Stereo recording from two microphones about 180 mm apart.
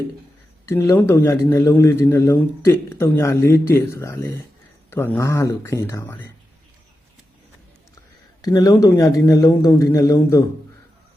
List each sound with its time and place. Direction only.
0.6 s a man's voice: 15° left (ahead or behind)
8.4 s speech: 20° left (ahead or behind)